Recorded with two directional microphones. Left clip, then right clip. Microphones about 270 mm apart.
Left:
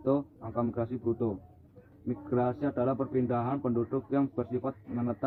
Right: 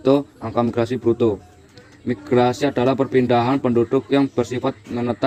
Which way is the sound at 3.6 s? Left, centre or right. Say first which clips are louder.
Right 13 dB; right.